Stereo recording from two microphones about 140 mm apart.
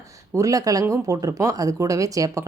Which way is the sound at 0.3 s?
25° right (ahead or behind).